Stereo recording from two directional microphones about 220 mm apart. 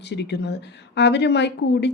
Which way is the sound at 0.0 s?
50° left (ahead or behind).